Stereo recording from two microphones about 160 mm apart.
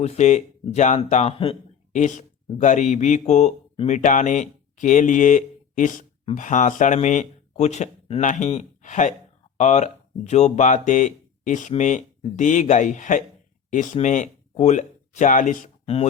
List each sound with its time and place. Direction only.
0.0 s speech: 45° left (ahead or behind)